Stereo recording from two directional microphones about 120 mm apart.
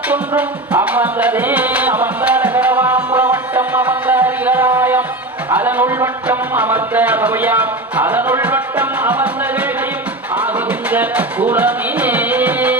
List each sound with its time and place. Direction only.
0.4 s music: 15° right (ahead or behind)
5.5 s a sound: 15° right (ahead or behind)
10.3 s music: 15° right (ahead or behind)